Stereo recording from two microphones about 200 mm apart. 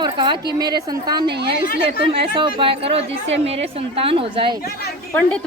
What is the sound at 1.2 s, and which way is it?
Speech, 55° right (ahead or behind).